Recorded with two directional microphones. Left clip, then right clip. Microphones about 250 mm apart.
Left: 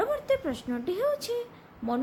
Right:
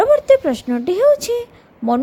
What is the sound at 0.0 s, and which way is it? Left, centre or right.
A woman's voice, right.